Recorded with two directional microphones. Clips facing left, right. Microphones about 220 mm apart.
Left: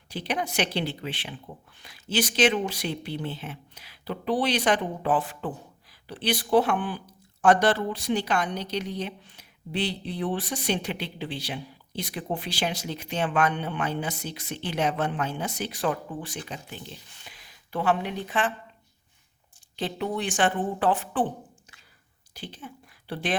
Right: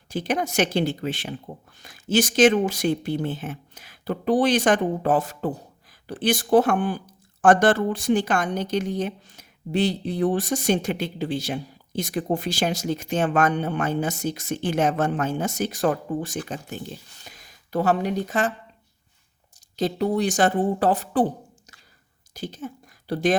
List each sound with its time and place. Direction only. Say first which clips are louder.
0.1 s a woman's voice: right 5 dB; 45° right (ahead or behind)
19.7 s a woman's voice: right 7 dB; 40° right (ahead or behind)